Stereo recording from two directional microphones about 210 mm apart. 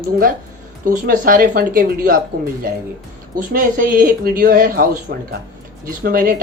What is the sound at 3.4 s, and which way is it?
Speech, 40° right (ahead or behind).